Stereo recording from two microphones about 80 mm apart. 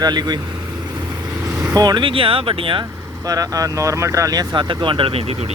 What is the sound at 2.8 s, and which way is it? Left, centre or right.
Speech, right.